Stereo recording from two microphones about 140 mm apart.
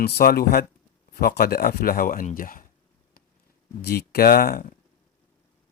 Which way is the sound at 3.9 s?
90° left.